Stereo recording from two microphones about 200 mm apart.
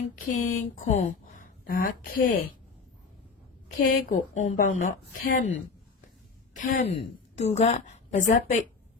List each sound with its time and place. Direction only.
0.3 s a woman's voice: 40° left (ahead or behind)
3.8 s a woman's voice: 40° left (ahead or behind)